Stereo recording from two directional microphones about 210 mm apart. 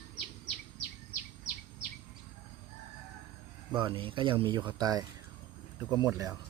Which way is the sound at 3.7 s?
25° right (ahead or behind).